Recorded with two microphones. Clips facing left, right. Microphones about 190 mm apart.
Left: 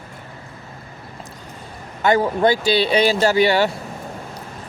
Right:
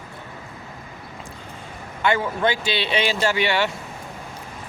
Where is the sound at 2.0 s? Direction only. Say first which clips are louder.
Left 5 dB; 40° left (ahead or behind).